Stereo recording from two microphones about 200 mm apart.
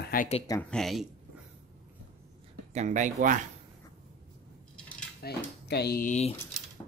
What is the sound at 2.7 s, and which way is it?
Speech, 35° right (ahead or behind).